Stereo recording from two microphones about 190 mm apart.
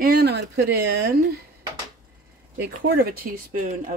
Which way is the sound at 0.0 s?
55° right (ahead or behind).